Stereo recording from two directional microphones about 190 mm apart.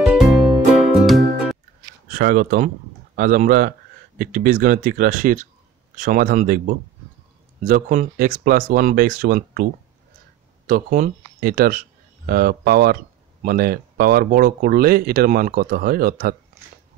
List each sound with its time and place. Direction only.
0.0 s music: centre (ahead or behind)
2.0 s speech: 45° right (ahead or behind)
7.6 s speech: 40° right (ahead or behind)
10.7 s speech: 45° right (ahead or behind)